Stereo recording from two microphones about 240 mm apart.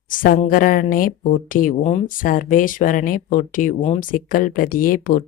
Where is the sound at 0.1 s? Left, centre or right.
Left.